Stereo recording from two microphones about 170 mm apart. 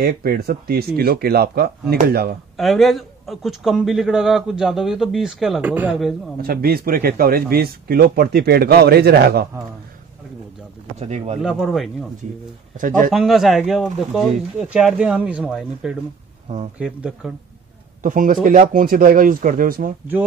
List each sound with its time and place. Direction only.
0.0 s speech: 65° right (ahead or behind)
2.5 s speech: centre (ahead or behind)
6.4 s speech: 60° right (ahead or behind)
11.0 s speech: 40° right (ahead or behind)
11.4 s speech: 5° right (ahead or behind)
12.8 s speech: 50° right (ahead or behind)
13.1 s speech: centre (ahead or behind)
18.0 s speech: 50° right (ahead or behind)